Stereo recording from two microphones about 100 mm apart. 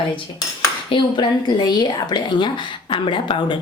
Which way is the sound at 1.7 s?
45° left (ahead or behind).